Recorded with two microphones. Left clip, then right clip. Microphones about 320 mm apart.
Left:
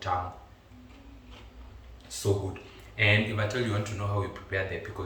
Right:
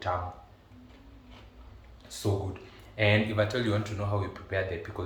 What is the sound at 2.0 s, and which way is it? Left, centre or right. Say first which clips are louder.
Speech: left 3 dB; centre.